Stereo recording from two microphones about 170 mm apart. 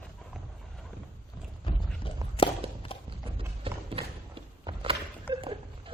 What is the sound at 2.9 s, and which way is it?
Clip-clop, 35° left (ahead or behind).